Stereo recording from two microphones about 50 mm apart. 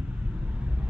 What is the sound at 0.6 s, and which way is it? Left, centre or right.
Vehicle, right.